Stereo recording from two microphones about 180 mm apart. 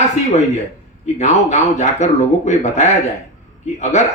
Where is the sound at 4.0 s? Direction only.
40° left (ahead or behind).